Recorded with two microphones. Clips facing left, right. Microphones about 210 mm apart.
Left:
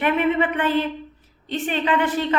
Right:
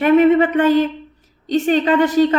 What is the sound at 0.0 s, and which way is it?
A woman's voice, 40° right (ahead or behind).